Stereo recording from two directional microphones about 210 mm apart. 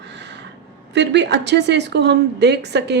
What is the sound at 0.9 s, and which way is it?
A woman's voice, 55° right (ahead or behind).